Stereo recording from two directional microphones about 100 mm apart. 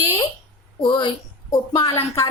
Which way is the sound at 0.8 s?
55° left (ahead or behind).